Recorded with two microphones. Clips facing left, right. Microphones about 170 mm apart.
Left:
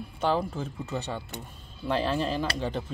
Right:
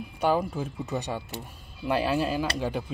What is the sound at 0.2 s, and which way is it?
Speech, 10° right (ahead or behind).